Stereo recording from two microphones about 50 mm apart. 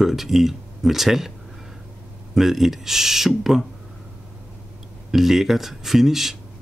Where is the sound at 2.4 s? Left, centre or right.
Centre.